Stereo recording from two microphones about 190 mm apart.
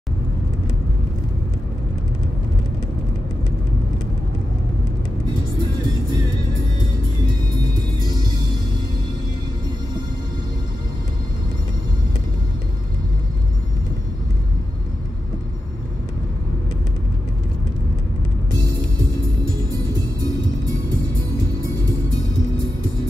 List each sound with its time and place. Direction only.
7.5 s music: 20° right (ahead or behind)
19.9 s music: 20° right (ahead or behind)